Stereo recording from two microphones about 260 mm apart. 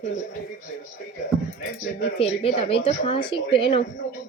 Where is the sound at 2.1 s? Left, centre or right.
Left.